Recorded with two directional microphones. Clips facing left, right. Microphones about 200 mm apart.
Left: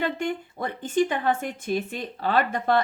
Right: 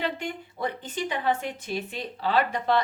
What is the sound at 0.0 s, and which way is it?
A woman's voice, 50° left (ahead or behind).